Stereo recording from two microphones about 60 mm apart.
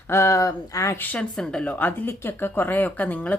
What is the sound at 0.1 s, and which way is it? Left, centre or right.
Speech, left.